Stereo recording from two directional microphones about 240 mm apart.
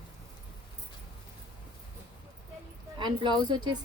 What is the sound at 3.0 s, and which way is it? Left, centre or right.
Speech, centre.